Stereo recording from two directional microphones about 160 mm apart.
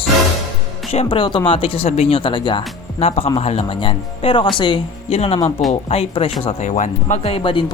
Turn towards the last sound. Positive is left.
turn(degrees=30)  # may be behind; listen again after turning